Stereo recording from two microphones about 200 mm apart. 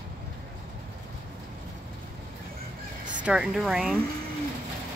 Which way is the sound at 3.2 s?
5° right (ahead or behind).